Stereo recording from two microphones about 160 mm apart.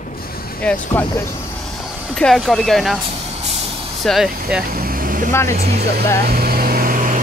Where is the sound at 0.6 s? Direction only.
10° left (ahead or behind).